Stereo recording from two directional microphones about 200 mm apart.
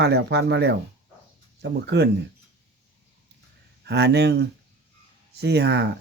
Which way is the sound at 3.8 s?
55° right (ahead or behind).